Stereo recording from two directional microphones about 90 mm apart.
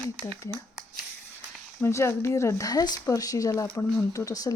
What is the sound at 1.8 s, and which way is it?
Speech, 30° left (ahead or behind).